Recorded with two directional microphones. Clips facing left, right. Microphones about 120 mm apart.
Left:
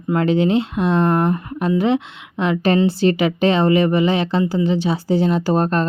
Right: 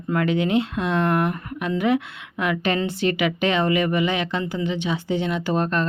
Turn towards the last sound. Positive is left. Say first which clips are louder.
# left 5 dB
turn(degrees=35)  # may be behind; listen again after turning